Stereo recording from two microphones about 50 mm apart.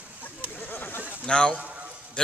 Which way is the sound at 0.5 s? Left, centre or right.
Left.